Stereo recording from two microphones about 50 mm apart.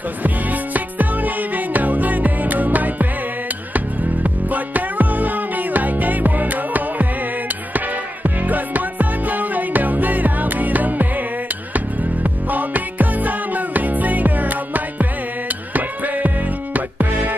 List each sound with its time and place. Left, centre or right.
0.2 s music: right